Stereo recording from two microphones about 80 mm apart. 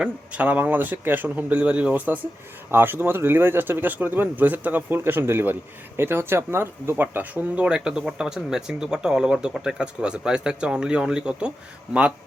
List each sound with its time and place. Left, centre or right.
0.0 s speech: centre